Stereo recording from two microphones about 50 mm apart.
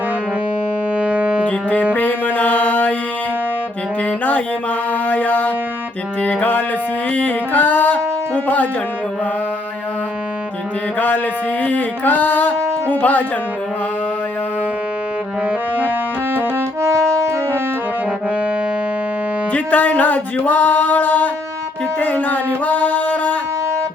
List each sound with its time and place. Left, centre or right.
0.9 s music: right
1.9 s music: left
5.0 s a sound: left
6.2 s music: left
11.6 s speech: left
16.8 s music: right
19.5 s music: left